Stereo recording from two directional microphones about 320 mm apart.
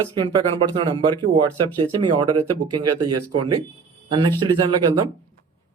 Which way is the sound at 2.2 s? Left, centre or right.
Right.